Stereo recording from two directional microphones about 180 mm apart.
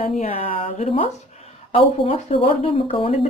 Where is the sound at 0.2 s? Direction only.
35° left (ahead or behind).